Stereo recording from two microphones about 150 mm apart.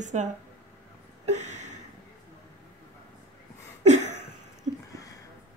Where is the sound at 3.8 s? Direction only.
50° right (ahead or behind).